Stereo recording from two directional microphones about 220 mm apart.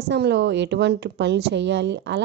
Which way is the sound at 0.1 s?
50° right (ahead or behind).